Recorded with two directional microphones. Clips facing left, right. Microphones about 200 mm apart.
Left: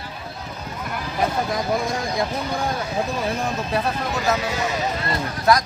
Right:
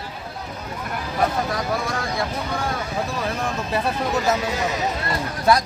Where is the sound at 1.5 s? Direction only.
15° left (ahead or behind).